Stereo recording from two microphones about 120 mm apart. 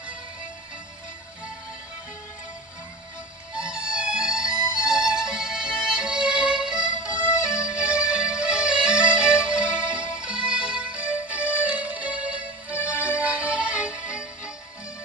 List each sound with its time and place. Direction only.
3.5 s music: 10° right (ahead or behind)
7.3 s music: 25° left (ahead or behind)
7.7 s music: 10° right (ahead or behind)